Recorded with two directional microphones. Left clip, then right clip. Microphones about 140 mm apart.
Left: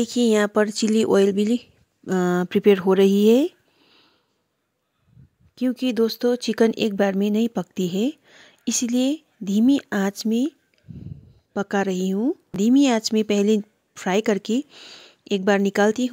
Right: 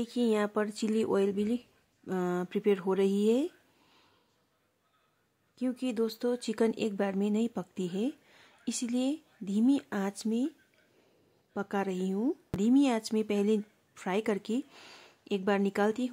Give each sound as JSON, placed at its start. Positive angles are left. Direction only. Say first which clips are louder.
{"t": 0.0, "sound": "speech", "louder": "left 10 dB", "side_deg": 50}
{"t": 5.5, "sound": "speech", "louder": "left 10 dB", "side_deg": 50}
{"t": 11.5, "sound": "a woman's voice", "louder": "left 10 dB", "side_deg": 40}
{"t": 14.7, "sound": "speech", "louder": "left 9 dB", "side_deg": 25}
{"t": 15.2, "sound": "speech", "louder": "left 10 dB", "side_deg": 45}